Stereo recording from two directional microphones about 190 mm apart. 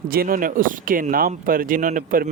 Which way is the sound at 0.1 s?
50° right (ahead or behind).